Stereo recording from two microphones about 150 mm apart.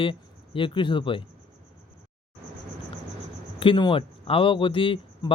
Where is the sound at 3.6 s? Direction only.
35° left (ahead or behind).